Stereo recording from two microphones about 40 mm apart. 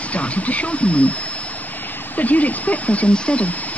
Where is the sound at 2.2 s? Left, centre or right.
Left.